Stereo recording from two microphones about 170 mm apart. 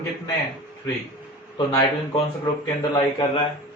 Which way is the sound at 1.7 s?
25° left (ahead or behind).